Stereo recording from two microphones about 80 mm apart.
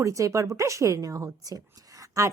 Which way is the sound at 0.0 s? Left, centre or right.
Right.